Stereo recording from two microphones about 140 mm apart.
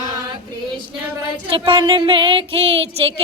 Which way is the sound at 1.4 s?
40° right (ahead or behind).